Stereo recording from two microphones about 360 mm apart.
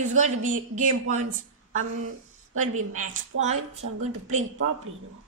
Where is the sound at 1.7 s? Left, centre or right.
Right.